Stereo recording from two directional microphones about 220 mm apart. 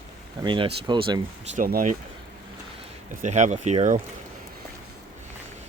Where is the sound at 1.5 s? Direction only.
40° right (ahead or behind).